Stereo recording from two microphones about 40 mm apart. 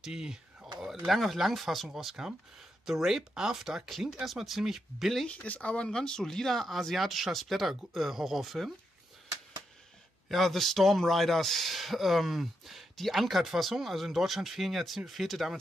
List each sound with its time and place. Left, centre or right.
0.0 s a sound: centre
1.0 s speech: centre
5.3 s speech: left
5.9 s speech: centre
10.3 s speech: centre